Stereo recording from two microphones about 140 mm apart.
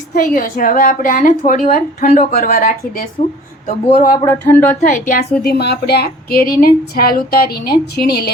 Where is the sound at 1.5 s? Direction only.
65° left (ahead or behind); by 3.1 s 85° left.